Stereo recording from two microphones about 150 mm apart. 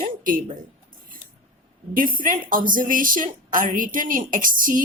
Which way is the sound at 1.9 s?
65° right (ahead or behind).